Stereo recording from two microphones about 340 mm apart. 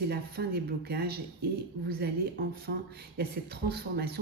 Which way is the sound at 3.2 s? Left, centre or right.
Right.